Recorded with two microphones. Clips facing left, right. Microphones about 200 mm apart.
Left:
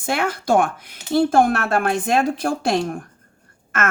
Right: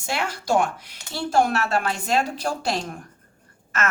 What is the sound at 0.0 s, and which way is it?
Speech, 55° left (ahead or behind).